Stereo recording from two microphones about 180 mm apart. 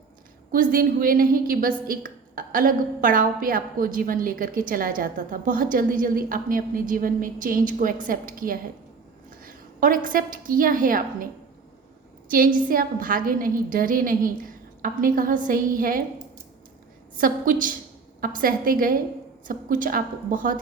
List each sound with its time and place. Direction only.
0.5 s a woman's voice: 50° right (ahead or behind)
12.5 s a woman's voice: 50° right (ahead or behind)